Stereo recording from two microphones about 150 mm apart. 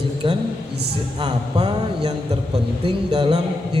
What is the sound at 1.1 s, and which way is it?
Mantra, 30° right (ahead or behind).